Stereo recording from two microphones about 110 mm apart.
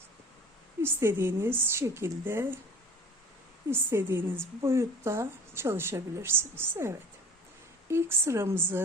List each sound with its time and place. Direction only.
0.8 s a woman's voice: 20° right (ahead or behind)
3.7 s a woman's voice: 20° right (ahead or behind)